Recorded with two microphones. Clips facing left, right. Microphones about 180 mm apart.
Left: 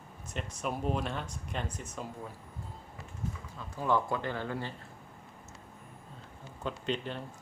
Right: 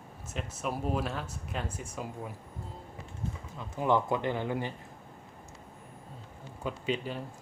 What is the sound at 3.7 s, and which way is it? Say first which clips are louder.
Speech: right 3 dB; 20° right (ahead or behind).